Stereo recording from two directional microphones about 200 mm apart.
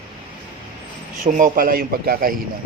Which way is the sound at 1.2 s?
40° right (ahead or behind).